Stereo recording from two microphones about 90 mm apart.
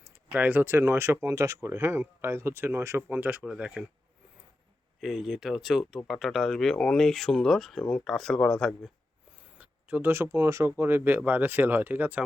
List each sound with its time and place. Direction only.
0.0 s a sound: 15° right (ahead or behind)
0.6 s speech: 25° right (ahead or behind)
3.4 s speech: 10° right (ahead or behind)
4.9 s speech: centre (ahead or behind)
9.6 s speech: 15° right (ahead or behind)